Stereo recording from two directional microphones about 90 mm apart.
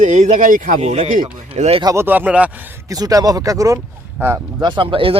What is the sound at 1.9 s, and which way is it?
Speech, 20° right (ahead or behind).